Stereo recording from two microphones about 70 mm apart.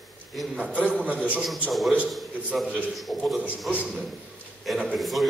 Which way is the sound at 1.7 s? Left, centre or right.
Centre.